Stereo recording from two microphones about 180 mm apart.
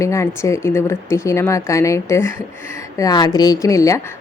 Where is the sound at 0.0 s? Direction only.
15° left (ahead or behind).